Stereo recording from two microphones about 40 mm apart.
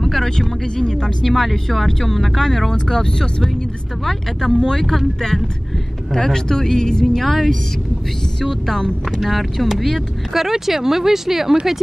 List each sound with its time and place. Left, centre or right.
0.0 s speech: centre
1.2 s speech: centre
4.0 s speech: centre
7.2 s speech: centre